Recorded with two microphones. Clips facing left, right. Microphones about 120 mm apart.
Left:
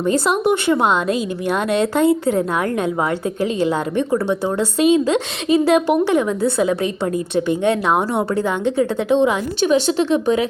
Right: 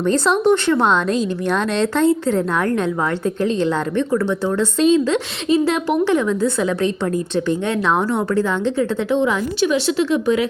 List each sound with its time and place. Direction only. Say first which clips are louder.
0.0 s a woman's voice: right 1 dB; 10° left (ahead or behind)